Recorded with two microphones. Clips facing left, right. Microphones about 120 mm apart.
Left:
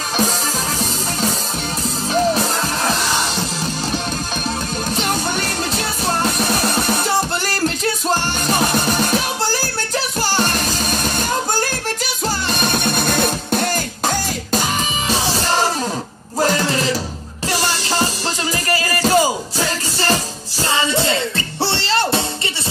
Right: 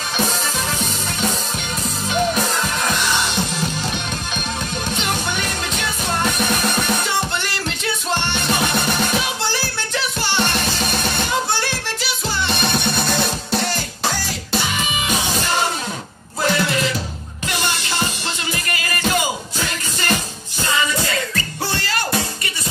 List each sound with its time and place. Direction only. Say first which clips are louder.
5.8 s music: left 1 dB; 35° left (ahead or behind)
12.4 s music: even; 45° left (ahead or behind)
14.5 s music: left 2 dB; 40° left (ahead or behind)